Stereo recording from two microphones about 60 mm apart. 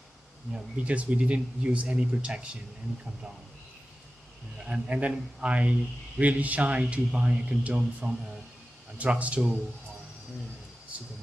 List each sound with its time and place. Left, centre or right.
0.5 s speech: centre
4.6 s speech: right